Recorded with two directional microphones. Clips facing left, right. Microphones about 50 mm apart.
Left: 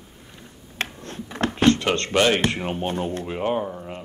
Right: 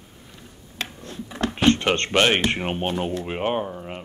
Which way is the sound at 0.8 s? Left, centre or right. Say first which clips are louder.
Left 3 dB; left.